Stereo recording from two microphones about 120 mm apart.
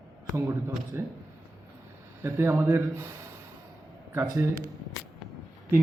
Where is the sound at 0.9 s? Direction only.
20° right (ahead or behind).